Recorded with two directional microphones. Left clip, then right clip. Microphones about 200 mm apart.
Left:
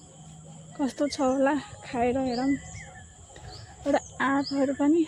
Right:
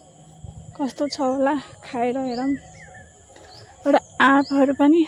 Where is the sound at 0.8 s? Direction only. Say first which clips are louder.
Right 3 dB; 10° right (ahead or behind).